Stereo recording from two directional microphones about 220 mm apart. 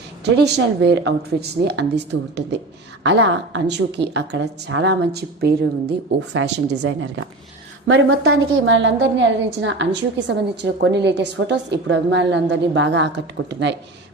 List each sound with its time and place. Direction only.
0.3 s speech: 50° right (ahead or behind)
3.0 s a woman's voice: 55° right (ahead or behind)